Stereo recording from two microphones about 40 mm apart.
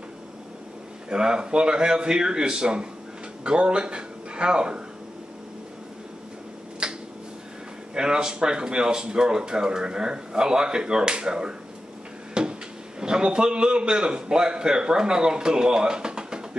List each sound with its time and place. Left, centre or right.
1.1 s speech: centre
6.8 s finger snapping: right
7.9 s speech: centre
12.4 s cupboard open or close: right
13.0 s speech: right